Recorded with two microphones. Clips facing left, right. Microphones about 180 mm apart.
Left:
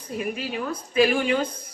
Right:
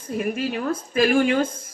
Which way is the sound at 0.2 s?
50° right (ahead or behind).